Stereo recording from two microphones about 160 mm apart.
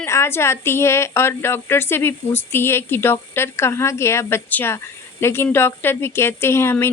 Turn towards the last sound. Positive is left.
turn(degrees=15)  # may be behind; listen again after turning